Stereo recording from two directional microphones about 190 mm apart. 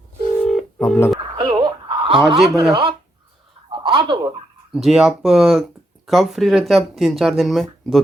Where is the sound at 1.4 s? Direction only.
25° right (ahead or behind).